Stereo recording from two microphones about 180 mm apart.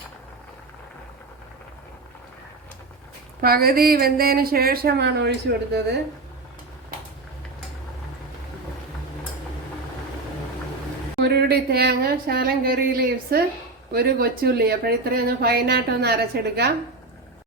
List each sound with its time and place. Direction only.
3.4 s speech: 55° right (ahead or behind)
11.2 s speech: 65° right (ahead or behind)